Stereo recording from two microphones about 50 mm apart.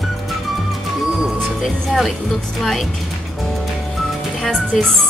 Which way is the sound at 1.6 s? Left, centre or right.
Centre.